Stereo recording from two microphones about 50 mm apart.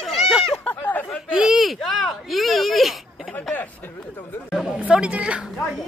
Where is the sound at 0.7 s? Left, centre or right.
Left.